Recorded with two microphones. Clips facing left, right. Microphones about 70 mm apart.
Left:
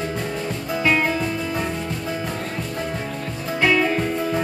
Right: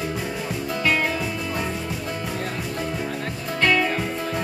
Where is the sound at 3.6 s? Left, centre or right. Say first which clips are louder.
Left 2 dB; centre.